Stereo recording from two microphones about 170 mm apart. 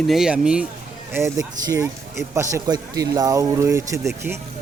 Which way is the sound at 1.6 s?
20° right (ahead or behind).